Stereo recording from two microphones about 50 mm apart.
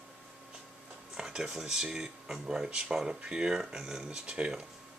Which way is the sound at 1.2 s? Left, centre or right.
Centre.